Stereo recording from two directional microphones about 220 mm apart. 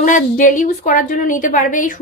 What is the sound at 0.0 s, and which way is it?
A woman's voice, 35° left (ahead or behind).